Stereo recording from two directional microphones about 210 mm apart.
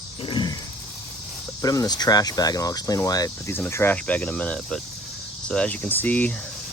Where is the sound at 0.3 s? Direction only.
20° left (ahead or behind).